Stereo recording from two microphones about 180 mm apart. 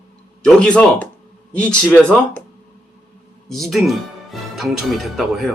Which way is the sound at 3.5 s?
Centre (ahead or behind).